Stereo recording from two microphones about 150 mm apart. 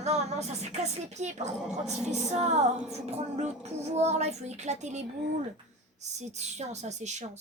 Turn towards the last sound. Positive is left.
turn(degrees=-50)  # may be behind; listen again after turning